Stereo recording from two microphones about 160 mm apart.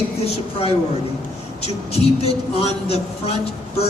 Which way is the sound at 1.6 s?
40° left (ahead or behind).